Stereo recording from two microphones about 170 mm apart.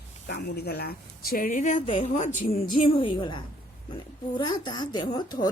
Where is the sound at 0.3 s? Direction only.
70° left (ahead or behind); by 2.6 s 45° left (ahead or behind).